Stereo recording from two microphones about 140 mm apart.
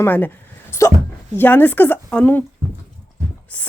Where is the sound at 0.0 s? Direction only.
15° left (ahead or behind).